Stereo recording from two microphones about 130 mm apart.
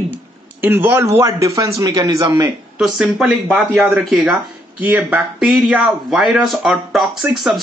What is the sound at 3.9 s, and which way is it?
Speech, centre (ahead or behind).